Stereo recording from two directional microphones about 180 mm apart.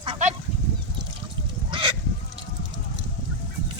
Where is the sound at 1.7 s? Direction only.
25° right (ahead or behind).